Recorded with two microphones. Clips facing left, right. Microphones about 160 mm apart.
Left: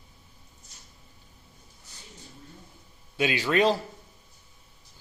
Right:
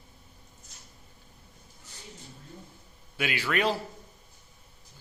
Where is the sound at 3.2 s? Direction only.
20° left (ahead or behind).